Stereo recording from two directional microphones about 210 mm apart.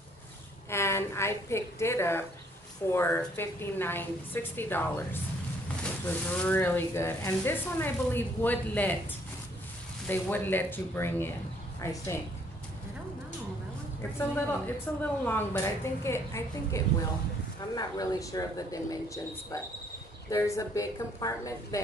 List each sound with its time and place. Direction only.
0.7 s a woman's voice: 10° left (ahead or behind)
10.0 s speech: 10° left (ahead or behind)
14.1 s speech: 10° left (ahead or behind)
20.2 s speech: 15° left (ahead or behind)